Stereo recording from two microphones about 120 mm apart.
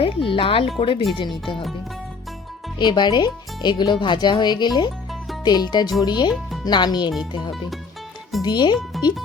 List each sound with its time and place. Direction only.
0.0 s speech: 45° left (ahead or behind)
2.7 s speech: 40° left (ahead or behind)
8.4 s speech: 40° left (ahead or behind)